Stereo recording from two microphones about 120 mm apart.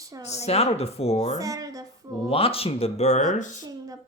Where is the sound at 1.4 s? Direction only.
30° right (ahead or behind).